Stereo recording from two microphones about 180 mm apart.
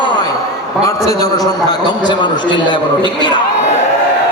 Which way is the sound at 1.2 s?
20° left (ahead or behind).